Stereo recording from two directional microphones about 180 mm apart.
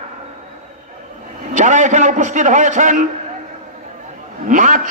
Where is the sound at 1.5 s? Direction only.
45° right (ahead or behind).